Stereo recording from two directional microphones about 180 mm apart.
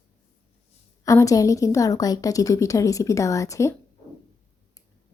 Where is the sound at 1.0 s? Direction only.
20° left (ahead or behind).